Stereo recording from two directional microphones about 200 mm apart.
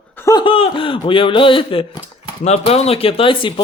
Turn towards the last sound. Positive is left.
turn(degrees=25)  # may be behind; listen again after turning